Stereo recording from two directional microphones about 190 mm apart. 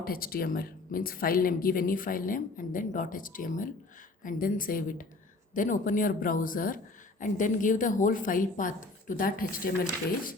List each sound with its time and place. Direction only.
0.0 s a woman's voice: 50° left (ahead or behind)